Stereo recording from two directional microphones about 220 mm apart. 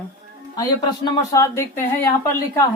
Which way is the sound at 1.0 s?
15° left (ahead or behind).